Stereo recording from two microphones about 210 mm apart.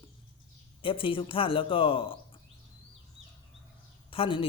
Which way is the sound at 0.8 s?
25° left (ahead or behind).